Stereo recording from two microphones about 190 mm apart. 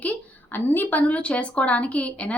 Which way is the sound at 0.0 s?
10° left (ahead or behind).